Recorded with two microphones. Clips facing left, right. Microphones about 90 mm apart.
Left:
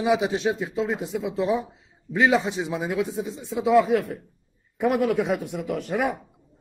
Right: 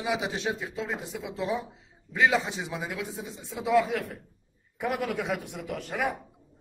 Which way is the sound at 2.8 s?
25° left (ahead or behind).